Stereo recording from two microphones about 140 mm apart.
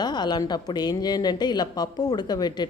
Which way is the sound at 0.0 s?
30° left (ahead or behind).